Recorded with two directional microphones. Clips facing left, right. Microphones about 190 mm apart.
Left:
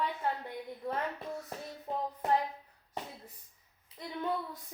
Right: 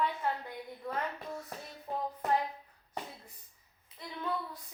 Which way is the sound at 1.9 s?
25° left (ahead or behind).